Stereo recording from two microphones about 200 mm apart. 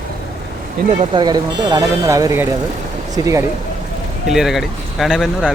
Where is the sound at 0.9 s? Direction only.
25° right (ahead or behind).